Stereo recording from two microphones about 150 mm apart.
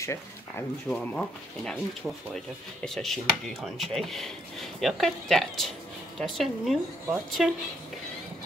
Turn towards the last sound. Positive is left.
turn(degrees=0)  # may be behind; listen again after turning